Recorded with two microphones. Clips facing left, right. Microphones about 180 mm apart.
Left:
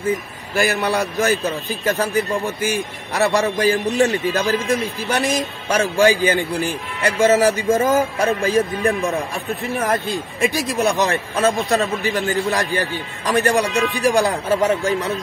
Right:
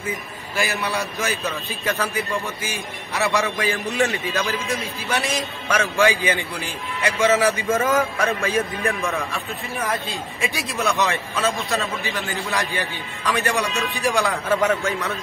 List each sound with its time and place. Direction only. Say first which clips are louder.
0.6 s speech: left 6 dB; 45° left (ahead or behind)
1.7 s a man's voice: left 6 dB; 40° left (ahead or behind)